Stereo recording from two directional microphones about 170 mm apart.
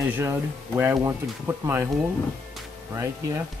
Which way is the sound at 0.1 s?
15° right (ahead or behind).